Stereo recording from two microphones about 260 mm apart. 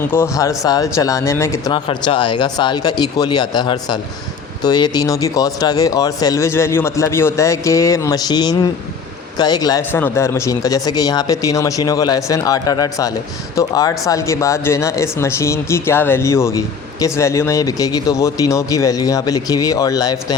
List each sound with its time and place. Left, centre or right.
0.1 s speech: centre